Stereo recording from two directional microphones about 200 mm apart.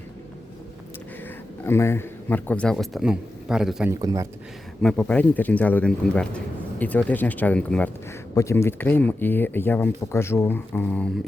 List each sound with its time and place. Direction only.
1.6 s a man's voice: 10° left (ahead or behind)
4.0 s speech: 15° right (ahead or behind)
4.8 s speech: 5° left (ahead or behind)